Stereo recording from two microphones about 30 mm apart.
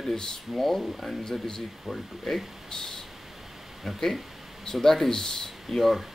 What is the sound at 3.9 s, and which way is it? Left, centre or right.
Speech, centre.